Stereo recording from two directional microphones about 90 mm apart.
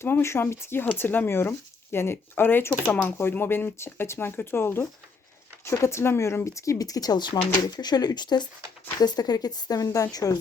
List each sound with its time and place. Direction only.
0.0 s speech: 30° left (ahead or behind)